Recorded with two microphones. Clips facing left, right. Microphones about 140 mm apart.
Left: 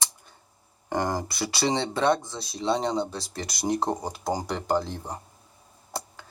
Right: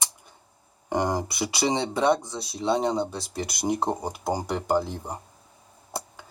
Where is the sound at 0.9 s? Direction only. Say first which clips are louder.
Right 2 dB; 15° right (ahead or behind).